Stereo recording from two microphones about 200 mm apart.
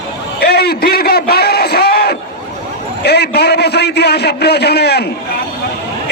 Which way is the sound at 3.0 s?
55° left (ahead or behind).